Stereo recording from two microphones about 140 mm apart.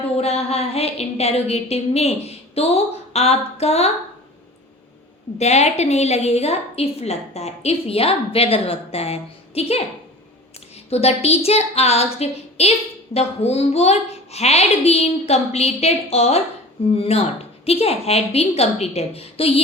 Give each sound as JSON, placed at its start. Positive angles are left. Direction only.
{"t": 0.2, "sound": "a woman's voice", "side_deg": 50}
{"t": 5.4, "sound": "a woman's voice", "side_deg": 50}
{"t": 10.8, "sound": "a woman's voice", "side_deg": 45}